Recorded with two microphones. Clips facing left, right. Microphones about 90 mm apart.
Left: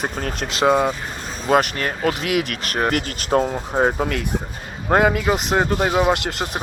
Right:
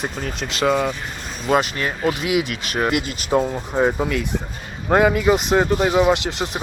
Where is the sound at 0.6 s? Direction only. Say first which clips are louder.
Left 2 dB; 20° left (ahead or behind).